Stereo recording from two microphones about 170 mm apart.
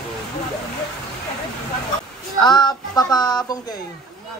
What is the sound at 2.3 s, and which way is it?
Music, 25° left (ahead or behind).